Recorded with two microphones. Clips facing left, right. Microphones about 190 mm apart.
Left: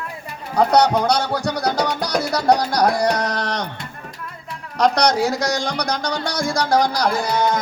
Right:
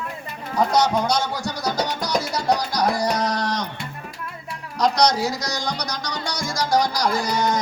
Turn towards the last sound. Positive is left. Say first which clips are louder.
# left 2 dB
turn(degrees=60)  # may be behind; listen again after turning